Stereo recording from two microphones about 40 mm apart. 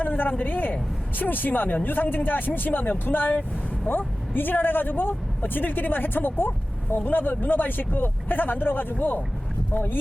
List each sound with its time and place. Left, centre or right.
0.0 s a woman's voice: left